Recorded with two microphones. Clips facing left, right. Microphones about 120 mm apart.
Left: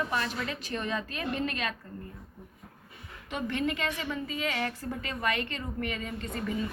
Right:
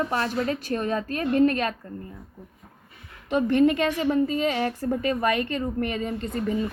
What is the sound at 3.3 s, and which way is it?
A woman's voice, 45° right (ahead or behind).